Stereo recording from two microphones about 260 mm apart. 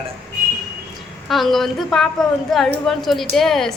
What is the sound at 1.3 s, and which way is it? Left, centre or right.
A woman's voice, centre.